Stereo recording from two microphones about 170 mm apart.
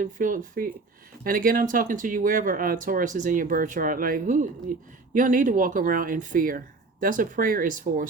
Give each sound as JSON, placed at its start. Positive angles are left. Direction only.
{"t": 0.0, "sound": "a man's voice", "side_deg": -50}